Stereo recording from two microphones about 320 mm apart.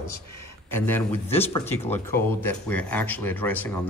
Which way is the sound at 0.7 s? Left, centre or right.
Centre.